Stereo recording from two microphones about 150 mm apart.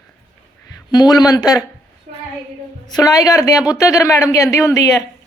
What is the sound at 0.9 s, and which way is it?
Speech, 25° left (ahead or behind).